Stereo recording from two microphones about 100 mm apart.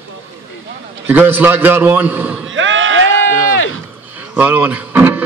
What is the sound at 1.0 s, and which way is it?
Speech, 15° right (ahead or behind).